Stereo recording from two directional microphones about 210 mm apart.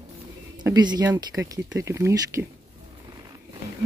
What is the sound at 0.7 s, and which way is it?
Speech, 20° right (ahead or behind).